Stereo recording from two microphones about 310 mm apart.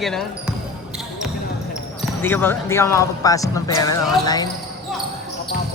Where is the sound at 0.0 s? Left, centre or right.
Centre.